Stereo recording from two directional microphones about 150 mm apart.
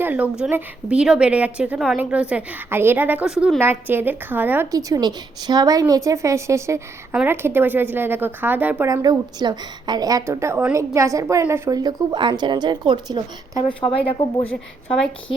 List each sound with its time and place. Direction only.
0.0 s a woman's voice: 10° right (ahead or behind)
3.6 s a woman's voice: 15° right (ahead or behind)
8.9 s a woman's voice: 25° right (ahead or behind)
14.1 s a woman's voice: 35° left (ahead or behind)